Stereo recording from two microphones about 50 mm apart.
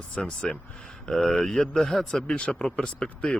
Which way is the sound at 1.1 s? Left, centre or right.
Centre.